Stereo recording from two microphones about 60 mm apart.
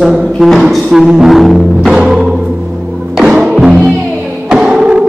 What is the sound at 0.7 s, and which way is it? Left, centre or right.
Music, centre.